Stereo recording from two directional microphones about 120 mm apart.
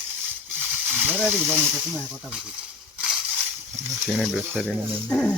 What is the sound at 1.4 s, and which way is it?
Speech, 15° right (ahead or behind).